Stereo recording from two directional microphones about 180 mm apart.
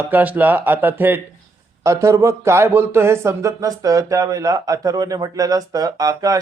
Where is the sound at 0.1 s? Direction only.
10° right (ahead or behind).